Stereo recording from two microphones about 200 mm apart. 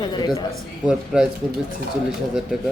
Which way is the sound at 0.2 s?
20° left (ahead or behind).